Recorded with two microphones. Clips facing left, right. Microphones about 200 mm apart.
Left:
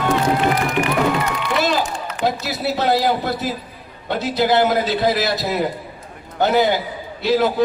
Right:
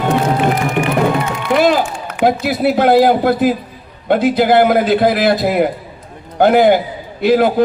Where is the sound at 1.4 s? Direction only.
55° right (ahead or behind).